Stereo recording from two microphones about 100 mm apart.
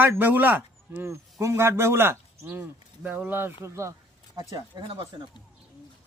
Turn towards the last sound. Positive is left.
turn(degrees=-50)  # may be behind; listen again after turning